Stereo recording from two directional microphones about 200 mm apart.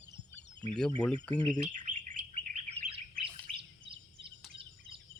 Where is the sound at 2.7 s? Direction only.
30° right (ahead or behind).